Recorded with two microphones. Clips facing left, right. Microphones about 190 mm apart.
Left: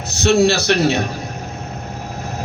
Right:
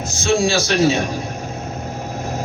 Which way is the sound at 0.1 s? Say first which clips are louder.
Left 4 dB; 65° left (ahead or behind).